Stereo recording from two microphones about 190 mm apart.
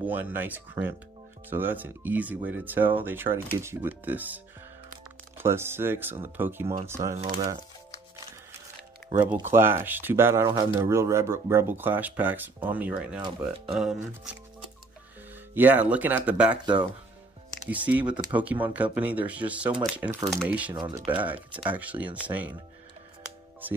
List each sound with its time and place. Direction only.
0.0 s speech: 10° right (ahead or behind)
5.4 s speech: 10° right (ahead or behind)
9.3 s speech: 10° right (ahead or behind)
15.5 s speech: 10° right (ahead or behind)
16.6 s speech: 25° right (ahead or behind)
17.6 s speech: 10° right (ahead or behind)
20.2 s speech: centre (ahead or behind)
20.7 s speech: 20° right (ahead or behind)
21.5 s speech: 10° right (ahead or behind)